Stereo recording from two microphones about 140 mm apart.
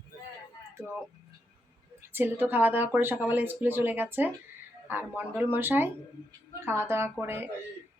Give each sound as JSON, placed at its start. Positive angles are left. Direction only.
{"t": 0.7, "sound": "a woman's voice", "side_deg": -20}